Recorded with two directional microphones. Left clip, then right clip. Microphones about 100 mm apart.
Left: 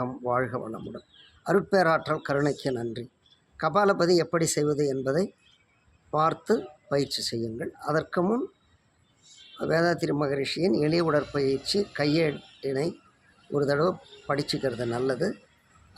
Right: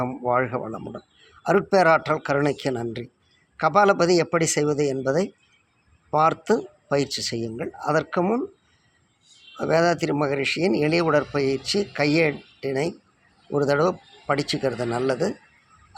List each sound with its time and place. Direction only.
0.3 s speech: 25° right (ahead or behind)
9.6 s speech: 20° right (ahead or behind)